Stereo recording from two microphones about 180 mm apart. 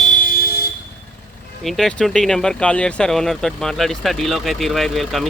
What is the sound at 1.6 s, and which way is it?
Speech, centre (ahead or behind).